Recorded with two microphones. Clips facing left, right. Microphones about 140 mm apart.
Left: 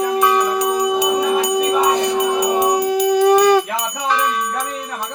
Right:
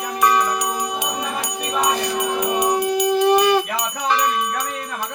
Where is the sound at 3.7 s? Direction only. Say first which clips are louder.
Left 1 dB; 5° left (ahead or behind).